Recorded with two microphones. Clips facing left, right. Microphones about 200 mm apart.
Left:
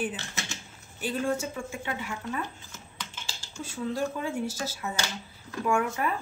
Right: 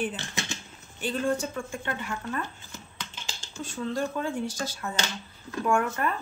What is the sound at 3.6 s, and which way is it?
Speech, 5° left (ahead or behind).